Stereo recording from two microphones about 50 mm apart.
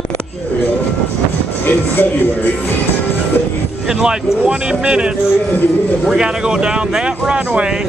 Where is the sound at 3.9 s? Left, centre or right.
Centre.